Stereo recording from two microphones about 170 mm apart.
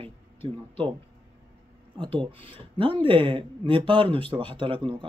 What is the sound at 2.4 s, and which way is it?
Speech, 30° right (ahead or behind).